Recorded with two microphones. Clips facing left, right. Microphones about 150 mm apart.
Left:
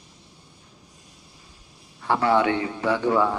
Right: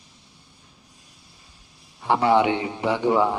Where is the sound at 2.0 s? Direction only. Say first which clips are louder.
Right 2 dB; 20° right (ahead or behind).